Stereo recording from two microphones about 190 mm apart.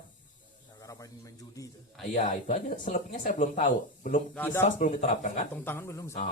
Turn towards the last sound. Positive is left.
turn(degrees=15)  # may be behind; listen again after turning